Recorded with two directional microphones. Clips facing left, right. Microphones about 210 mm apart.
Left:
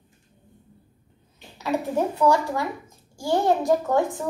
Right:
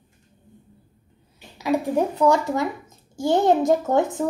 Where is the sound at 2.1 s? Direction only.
20° right (ahead or behind).